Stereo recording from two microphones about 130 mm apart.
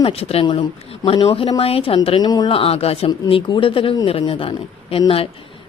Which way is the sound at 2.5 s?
45° left (ahead or behind).